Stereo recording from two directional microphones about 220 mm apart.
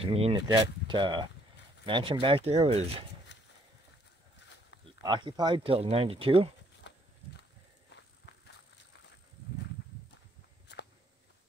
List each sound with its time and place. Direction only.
0.0 s speech: 25° right (ahead or behind)
5.0 s speech: 20° right (ahead or behind)
6.8 s walk: 55° left (ahead or behind)
8.3 s walk: 50° left (ahead or behind)